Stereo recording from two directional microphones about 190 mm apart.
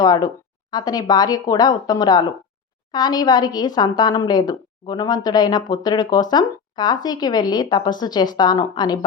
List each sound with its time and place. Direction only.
0.0 s a woman's voice: 20° left (ahead or behind)